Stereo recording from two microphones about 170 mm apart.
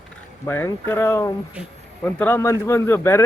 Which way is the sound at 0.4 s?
15° left (ahead or behind).